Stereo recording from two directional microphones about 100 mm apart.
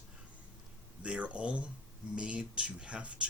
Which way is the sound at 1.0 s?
10° right (ahead or behind).